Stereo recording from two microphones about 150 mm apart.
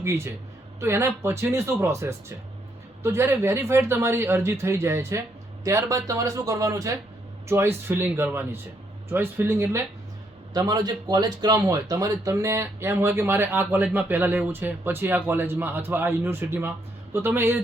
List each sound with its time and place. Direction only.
0.8 s speech: 15° right (ahead or behind)